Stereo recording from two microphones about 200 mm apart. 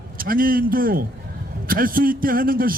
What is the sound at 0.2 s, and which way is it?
A man's voice, 45° right (ahead or behind).